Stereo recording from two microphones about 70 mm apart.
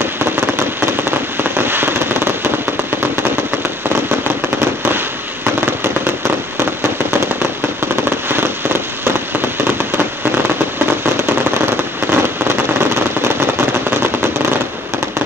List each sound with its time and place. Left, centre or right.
0.0 s firecracker: right
1.7 s fireworks: right
9.7 s fireworks: right
12.1 s fireworks: right